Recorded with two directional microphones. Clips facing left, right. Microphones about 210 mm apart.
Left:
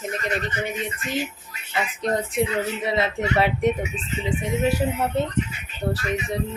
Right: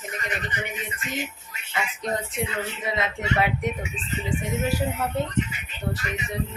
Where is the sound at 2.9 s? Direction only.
30° left (ahead or behind).